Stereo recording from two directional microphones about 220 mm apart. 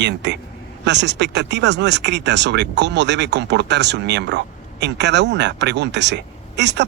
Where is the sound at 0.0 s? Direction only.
50° right (ahead or behind).